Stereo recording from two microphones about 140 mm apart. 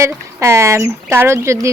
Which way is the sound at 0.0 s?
20° right (ahead or behind).